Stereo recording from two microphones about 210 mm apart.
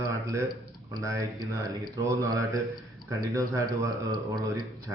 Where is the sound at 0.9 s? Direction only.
15° right (ahead or behind).